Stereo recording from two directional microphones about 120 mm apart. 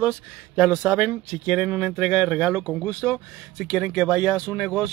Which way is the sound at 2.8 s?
10° left (ahead or behind).